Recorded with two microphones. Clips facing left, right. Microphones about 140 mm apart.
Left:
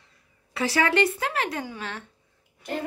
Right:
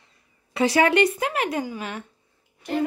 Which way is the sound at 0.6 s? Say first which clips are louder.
Right 4 dB; 20° right (ahead or behind).